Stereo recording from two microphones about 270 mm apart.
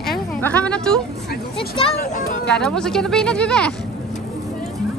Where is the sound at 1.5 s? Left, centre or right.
Centre.